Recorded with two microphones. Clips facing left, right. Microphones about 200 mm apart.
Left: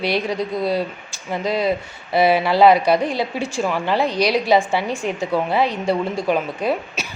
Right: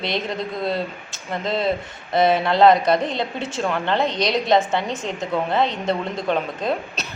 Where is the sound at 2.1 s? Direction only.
5° left (ahead or behind).